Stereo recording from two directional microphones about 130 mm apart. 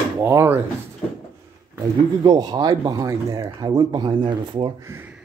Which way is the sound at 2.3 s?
30° right (ahead or behind).